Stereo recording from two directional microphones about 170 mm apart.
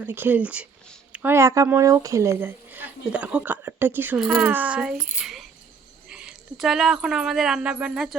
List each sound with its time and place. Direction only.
0.0 s speech: 10° right (ahead or behind)